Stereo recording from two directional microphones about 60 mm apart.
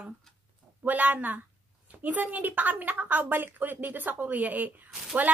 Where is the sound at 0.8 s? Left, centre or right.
Right.